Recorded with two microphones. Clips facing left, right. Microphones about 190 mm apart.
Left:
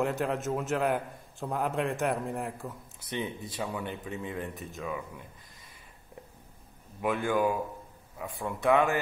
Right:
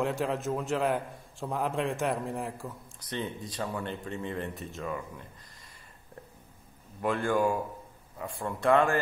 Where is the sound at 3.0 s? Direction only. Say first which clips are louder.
Left 1 dB; 25° left (ahead or behind).